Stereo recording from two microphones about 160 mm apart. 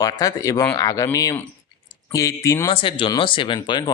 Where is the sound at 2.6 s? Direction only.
30° left (ahead or behind).